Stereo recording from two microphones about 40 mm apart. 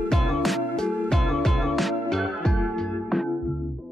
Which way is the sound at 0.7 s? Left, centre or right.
Centre.